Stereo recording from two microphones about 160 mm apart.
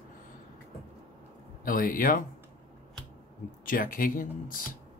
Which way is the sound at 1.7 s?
60° left (ahead or behind).